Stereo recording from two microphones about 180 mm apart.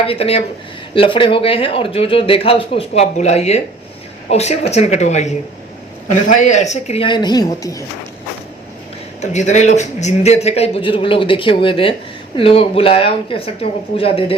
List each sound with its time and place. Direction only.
0.1 s a man's voice: 35° left (ahead or behind)
9.2 s a man's voice: 40° left (ahead or behind)